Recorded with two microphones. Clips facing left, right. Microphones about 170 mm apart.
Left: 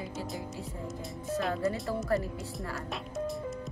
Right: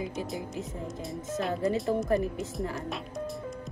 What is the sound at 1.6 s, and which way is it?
Speech, 20° right (ahead or behind).